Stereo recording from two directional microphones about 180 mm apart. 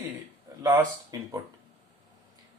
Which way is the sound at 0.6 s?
20° right (ahead or behind).